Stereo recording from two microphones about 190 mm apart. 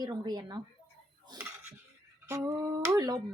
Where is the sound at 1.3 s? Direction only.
15° right (ahead or behind).